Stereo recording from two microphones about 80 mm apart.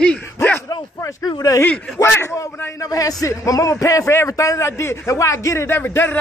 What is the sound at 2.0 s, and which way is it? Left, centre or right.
A man's voice, left.